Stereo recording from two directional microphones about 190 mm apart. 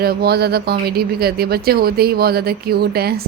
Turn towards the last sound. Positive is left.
turn(degrees=-55)  # may be behind; listen again after turning